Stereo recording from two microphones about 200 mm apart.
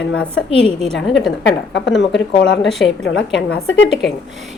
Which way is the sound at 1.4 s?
60° left (ahead or behind).